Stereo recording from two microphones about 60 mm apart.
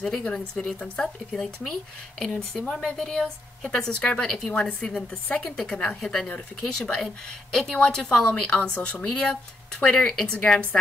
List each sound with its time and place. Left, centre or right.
0.2 s speech: centre
1.3 s speech: centre
6.2 s speech: left